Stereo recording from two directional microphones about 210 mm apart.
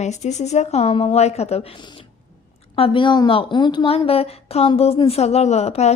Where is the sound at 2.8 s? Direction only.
25° left (ahead or behind).